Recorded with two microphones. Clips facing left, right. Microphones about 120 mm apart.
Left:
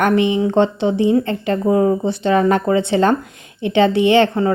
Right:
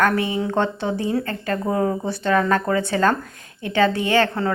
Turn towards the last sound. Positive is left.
turn(degrees=20)  # may be behind; listen again after turning